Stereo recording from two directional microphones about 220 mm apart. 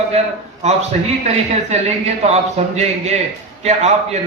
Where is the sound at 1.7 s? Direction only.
30° right (ahead or behind).